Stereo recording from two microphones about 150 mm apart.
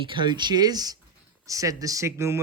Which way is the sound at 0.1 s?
30° right (ahead or behind).